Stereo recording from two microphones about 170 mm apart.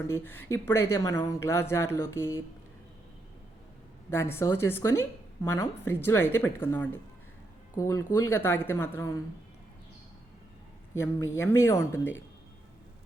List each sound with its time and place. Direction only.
0.1 s speech: 10° left (ahead or behind)
4.1 s a woman's voice: 15° left (ahead or behind)
10.9 s speech: 15° left (ahead or behind)